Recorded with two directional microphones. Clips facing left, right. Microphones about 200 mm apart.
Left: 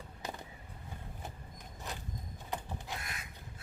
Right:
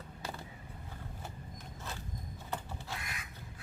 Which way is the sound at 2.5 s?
15° left (ahead or behind).